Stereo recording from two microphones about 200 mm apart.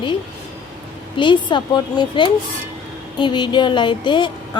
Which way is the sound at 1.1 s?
25° left (ahead or behind).